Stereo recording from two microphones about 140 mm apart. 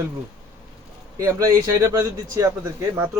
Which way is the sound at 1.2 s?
20° right (ahead or behind).